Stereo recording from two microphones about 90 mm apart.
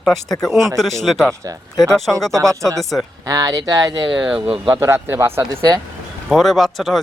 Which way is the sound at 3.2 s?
40° right (ahead or behind).